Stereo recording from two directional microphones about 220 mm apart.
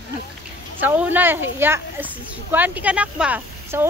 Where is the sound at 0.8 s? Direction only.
10° right (ahead or behind).